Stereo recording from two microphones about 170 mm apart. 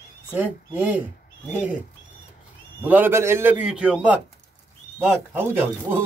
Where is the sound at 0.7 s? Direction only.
10° right (ahead or behind).